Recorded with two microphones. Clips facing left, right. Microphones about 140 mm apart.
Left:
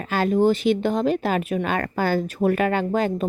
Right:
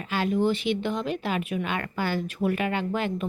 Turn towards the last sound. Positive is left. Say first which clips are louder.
# left 6 dB
turn(degrees=40)  # may be behind; listen again after turning